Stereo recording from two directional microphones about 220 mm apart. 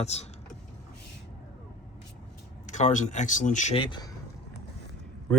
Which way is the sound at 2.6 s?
35° left (ahead or behind).